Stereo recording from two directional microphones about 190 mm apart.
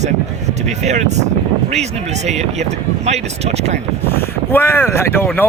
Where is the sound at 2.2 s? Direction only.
35° right (ahead or behind).